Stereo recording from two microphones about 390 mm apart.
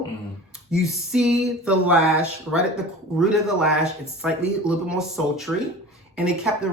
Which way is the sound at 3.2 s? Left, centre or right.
Centre.